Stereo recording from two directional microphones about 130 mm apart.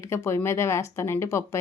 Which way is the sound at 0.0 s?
20° left (ahead or behind).